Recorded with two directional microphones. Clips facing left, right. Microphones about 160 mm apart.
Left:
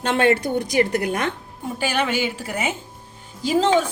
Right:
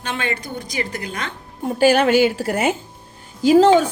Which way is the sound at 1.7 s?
45° right (ahead or behind).